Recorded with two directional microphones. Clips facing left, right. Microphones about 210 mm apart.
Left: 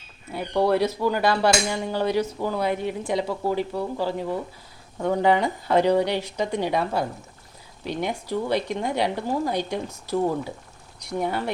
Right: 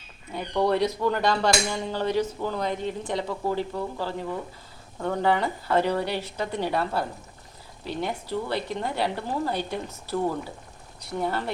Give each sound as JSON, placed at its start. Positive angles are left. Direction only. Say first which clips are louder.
{"t": 0.3, "sound": "a woman's voice", "louder": "left 2 dB", "side_deg": 5}